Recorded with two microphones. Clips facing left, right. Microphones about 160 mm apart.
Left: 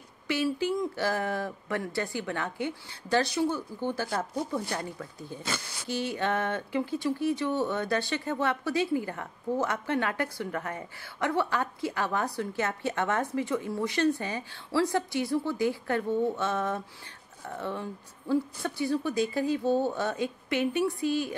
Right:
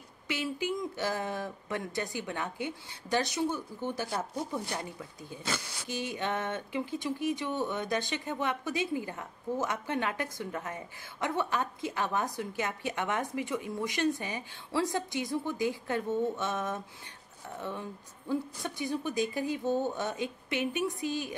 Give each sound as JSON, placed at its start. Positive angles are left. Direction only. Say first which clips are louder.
{"t": 0.3, "sound": "speech", "louder": "left 5 dB", "side_deg": -20}
{"t": 5.9, "sound": "speech", "louder": "left 4 dB", "side_deg": -15}